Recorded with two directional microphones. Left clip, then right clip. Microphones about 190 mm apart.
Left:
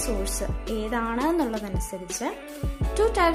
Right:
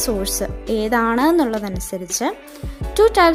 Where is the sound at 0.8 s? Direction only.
45° right (ahead or behind).